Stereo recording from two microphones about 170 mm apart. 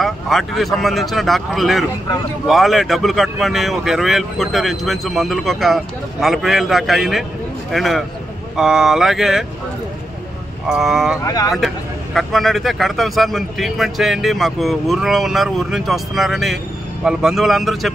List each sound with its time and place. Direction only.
0.0 s speech: centre (ahead or behind)
10.7 s speech: centre (ahead or behind)
11.2 s speech: 20° left (ahead or behind)
11.5 s speech: centre (ahead or behind)